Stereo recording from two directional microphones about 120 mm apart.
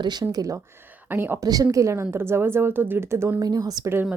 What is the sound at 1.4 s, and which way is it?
Speech, 30° right (ahead or behind).